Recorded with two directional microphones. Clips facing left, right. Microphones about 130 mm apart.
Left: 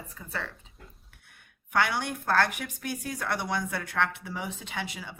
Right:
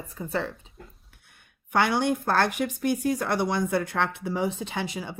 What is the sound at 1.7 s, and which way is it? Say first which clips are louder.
Speech: right 5 dB; 25° right (ahead or behind).